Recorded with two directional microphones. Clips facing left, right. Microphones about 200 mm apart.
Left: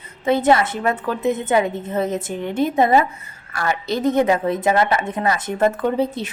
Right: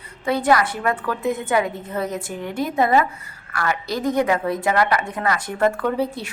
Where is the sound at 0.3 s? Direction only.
25° left (ahead or behind).